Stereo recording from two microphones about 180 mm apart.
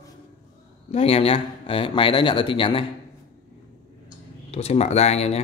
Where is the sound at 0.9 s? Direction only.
30° left (ahead or behind).